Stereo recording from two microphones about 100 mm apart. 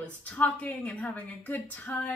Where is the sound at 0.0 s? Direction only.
15° left (ahead or behind).